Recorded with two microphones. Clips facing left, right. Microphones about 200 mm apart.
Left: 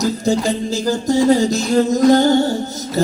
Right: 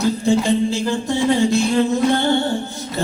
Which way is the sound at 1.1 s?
40° left (ahead or behind).